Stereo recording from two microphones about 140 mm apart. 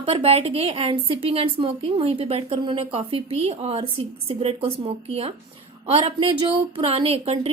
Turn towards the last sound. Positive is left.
turn(degrees=-45)  # may be behind; listen again after turning